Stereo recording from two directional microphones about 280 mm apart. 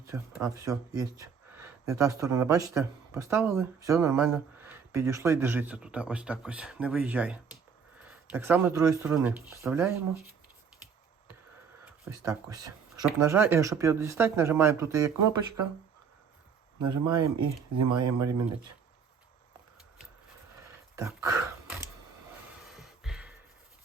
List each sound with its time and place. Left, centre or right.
0.0 s speech: centre
11.9 s speech: centre
16.8 s speech: right
17.7 s speech: right
20.7 s a sound: centre
23.0 s a sound: centre